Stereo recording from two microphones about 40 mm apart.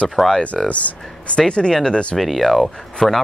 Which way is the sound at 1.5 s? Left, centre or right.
Left.